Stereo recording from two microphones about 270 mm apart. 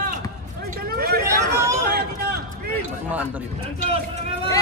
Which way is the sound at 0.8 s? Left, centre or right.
Right.